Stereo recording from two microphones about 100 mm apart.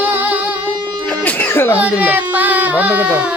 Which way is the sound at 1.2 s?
15° left (ahead or behind).